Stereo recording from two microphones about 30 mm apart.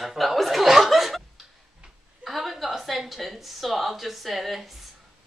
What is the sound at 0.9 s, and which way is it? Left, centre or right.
Chuckle, centre.